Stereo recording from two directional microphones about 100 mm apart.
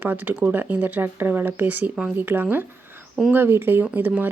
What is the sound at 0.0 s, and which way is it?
Speech, 20° right (ahead or behind).